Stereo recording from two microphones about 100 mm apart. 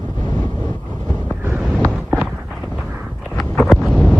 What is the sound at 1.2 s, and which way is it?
Vehicle, 20° right (ahead or behind).